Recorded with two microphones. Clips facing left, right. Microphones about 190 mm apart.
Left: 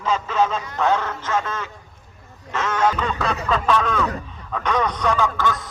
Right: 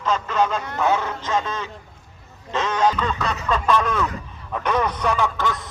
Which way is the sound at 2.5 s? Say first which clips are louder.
Right 1 dB; 20° right (ahead or behind).